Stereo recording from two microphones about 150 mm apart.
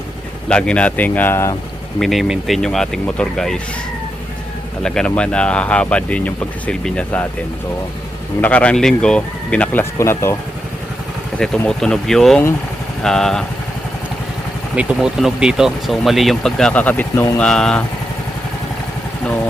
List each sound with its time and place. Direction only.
0.4 s speech: 5° left (ahead or behind)
2.0 s speech: centre (ahead or behind)
4.8 s speech: 5° left (ahead or behind)
8.4 s speech: 10° left (ahead or behind)
11.3 s speech: 5° left (ahead or behind)
14.8 s speech: 5° right (ahead or behind)